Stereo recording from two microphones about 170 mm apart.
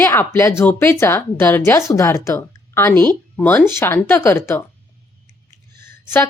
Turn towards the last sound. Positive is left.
turn(degrees=15)  # may be behind; listen again after turning